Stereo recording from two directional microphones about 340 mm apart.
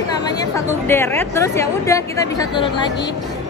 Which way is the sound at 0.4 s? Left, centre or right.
Centre.